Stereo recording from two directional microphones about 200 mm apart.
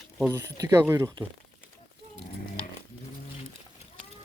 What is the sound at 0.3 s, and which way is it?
Speech, 15° right (ahead or behind).